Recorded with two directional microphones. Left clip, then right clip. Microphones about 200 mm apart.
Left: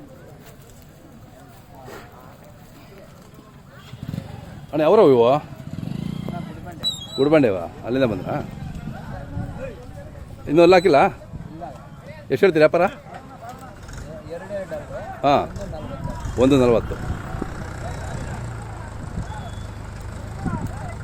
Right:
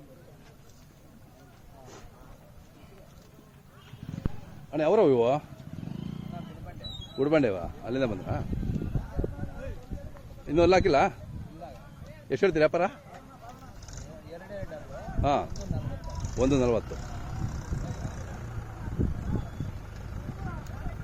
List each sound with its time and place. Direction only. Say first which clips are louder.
4.7 s speech: left 9 dB; 15° right (ahead or behind)
5.9 s vehicle: left 9 dB; 30° left (ahead or behind)
7.2 s speech: left 8 dB; 10° right (ahead or behind)
10.4 s a man's voice: left 9 dB; centre (ahead or behind)
12.3 s speech: left 9 dB; 10° right (ahead or behind)
15.2 s a man's voice: left 9 dB; centre (ahead or behind)
17.2 s vehicle: left 10 dB; 55° right (ahead or behind)